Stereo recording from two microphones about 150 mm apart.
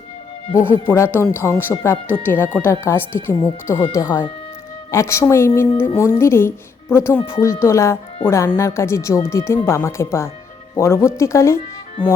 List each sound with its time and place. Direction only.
0.5 s speech: 15° left (ahead or behind)